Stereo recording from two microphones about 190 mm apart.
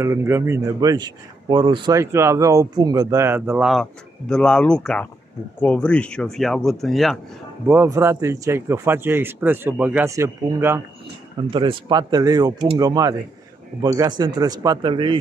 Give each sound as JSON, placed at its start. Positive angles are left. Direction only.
{"t": 0.0, "sound": "speech", "side_deg": -15}
{"t": 7.6, "sound": "speech", "side_deg": -10}
{"t": 11.5, "sound": "speech", "side_deg": -25}